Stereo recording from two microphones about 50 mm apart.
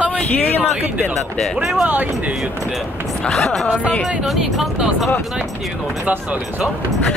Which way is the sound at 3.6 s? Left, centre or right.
Centre.